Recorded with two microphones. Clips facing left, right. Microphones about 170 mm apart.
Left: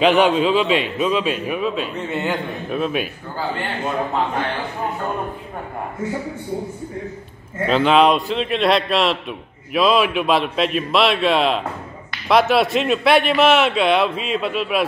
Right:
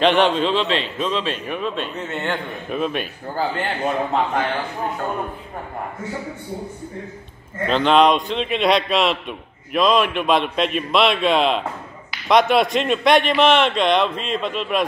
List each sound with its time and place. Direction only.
0.0 s a man's voice: 10° left (ahead or behind)
7.6 s speech: 5° left (ahead or behind)